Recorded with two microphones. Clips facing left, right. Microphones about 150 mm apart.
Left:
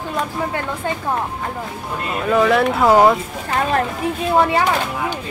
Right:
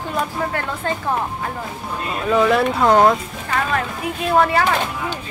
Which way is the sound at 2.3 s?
Centre (ahead or behind).